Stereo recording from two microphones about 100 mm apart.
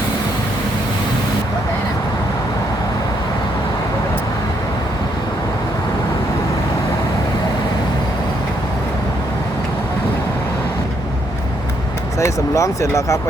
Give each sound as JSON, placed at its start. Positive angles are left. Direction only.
{"t": 12.2, "sound": "speech", "side_deg": 30}